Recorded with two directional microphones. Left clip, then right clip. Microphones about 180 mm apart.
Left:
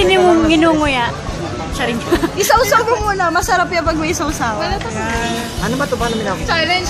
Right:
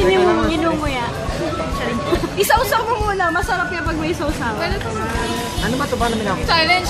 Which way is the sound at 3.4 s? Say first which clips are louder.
Left 5 dB; 60° left (ahead or behind).